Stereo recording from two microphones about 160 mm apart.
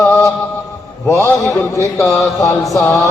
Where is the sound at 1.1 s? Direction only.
20° left (ahead or behind).